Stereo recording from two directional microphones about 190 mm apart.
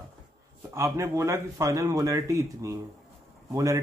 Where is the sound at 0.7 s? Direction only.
15° right (ahead or behind).